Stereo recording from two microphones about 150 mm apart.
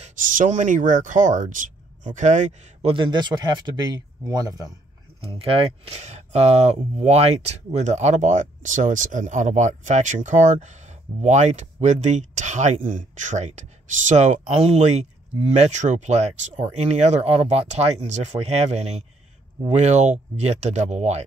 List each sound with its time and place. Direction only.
0.0 s speech: 60° right (ahead or behind); by 4.7 s 25° right (ahead or behind)
5.2 s speech: 35° right (ahead or behind)